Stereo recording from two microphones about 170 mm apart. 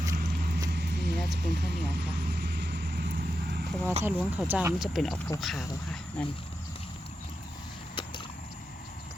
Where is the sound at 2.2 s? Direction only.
70° right (ahead or behind).